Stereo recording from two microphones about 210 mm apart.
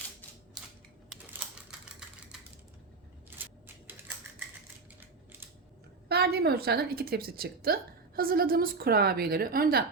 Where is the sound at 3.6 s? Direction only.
10° right (ahead or behind).